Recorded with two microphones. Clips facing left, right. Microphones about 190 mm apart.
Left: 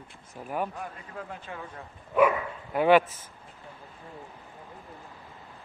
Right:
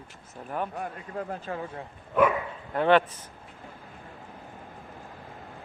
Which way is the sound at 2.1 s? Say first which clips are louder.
Left 1 dB; 10° left (ahead or behind).